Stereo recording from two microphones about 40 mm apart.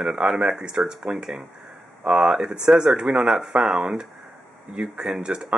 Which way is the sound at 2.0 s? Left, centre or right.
Right.